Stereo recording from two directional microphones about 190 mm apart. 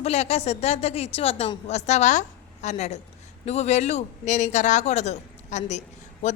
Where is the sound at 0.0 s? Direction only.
35° left (ahead or behind).